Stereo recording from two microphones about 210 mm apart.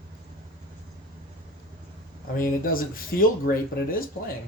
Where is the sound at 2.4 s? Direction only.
45° left (ahead or behind).